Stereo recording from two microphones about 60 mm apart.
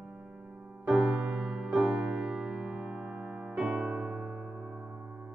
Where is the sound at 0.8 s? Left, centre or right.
Centre.